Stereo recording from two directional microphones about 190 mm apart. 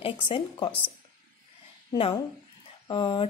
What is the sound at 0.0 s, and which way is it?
Speech, 30° left (ahead or behind).